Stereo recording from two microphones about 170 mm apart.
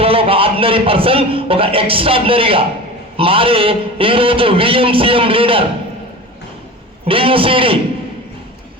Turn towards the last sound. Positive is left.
turn(degrees=-30)  # may be behind; listen again after turning